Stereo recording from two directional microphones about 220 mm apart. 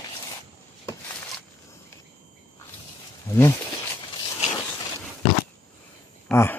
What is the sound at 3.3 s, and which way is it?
Speech, 15° left (ahead or behind).